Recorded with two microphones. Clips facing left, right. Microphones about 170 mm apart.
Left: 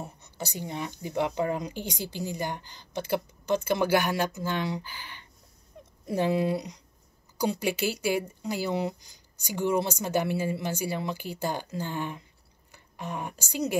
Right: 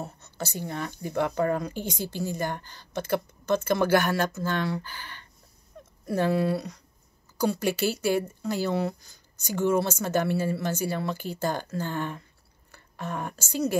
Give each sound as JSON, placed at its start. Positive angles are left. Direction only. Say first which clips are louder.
{"t": 0.0, "sound": "speech", "louder": "right 2 dB", "side_deg": 15}